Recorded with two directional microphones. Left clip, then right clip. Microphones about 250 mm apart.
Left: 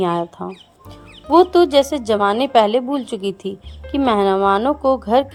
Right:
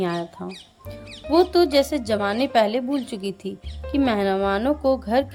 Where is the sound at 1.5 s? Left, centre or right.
Centre.